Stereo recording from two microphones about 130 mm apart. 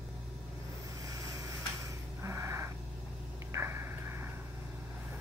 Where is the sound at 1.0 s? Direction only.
25° right (ahead or behind).